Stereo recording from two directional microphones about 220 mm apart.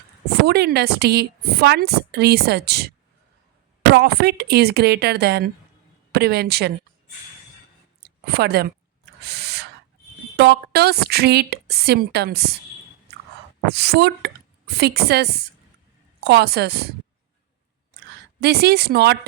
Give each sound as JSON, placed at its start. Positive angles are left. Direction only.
{"t": 0.4, "sound": "a woman's voice", "side_deg": -50}
{"t": 3.9, "sound": "a woman's voice", "side_deg": -50}
{"t": 8.0, "sound": "a woman's voice", "side_deg": -45}
{"t": 9.2, "sound": "owl", "side_deg": -50}
{"t": 10.3, "sound": "a woman's voice", "side_deg": -50}
{"t": 13.7, "sound": "a woman's voice", "side_deg": -50}
{"t": 18.3, "sound": "a woman's voice", "side_deg": -45}